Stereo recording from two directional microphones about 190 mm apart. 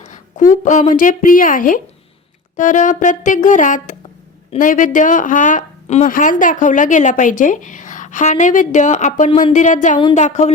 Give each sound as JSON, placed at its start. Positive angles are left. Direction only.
{"t": 0.0, "sound": "speech", "side_deg": 40}